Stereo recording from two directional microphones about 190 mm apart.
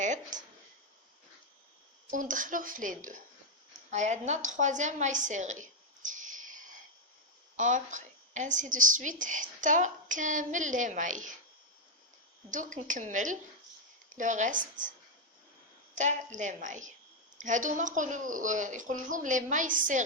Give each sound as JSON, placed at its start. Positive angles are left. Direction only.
{"t": 0.0, "sound": "a sound", "side_deg": -40}
{"t": 2.0, "sound": "a woman's voice", "side_deg": -45}
{"t": 12.5, "sound": "a woman's voice", "side_deg": -40}
{"t": 16.0, "sound": "a woman's voice", "side_deg": -40}